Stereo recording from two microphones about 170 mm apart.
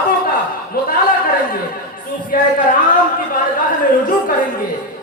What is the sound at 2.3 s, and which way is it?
Speech, 55° left (ahead or behind).